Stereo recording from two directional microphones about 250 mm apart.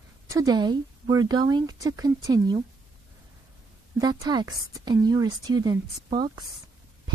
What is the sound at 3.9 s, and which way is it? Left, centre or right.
A woman's voice, centre.